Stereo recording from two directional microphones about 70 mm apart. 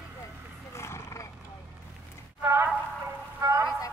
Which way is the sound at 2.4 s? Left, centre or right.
Right.